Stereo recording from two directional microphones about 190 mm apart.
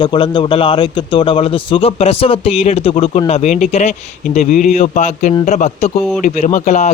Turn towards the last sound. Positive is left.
turn(degrees=40)  # may be behind; listen again after turning